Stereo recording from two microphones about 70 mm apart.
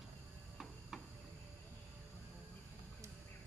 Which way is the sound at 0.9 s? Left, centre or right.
Centre.